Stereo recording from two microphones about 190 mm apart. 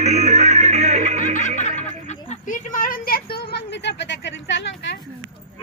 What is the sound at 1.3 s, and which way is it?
Snicker, 40° left (ahead or behind).